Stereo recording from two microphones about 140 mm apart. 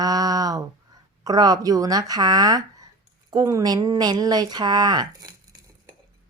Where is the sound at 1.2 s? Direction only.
30° right (ahead or behind).